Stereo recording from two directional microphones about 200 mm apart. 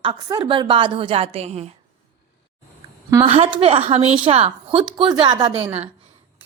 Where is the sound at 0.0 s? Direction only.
25° right (ahead or behind).